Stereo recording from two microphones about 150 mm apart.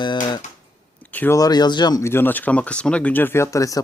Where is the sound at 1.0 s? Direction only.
10° left (ahead or behind).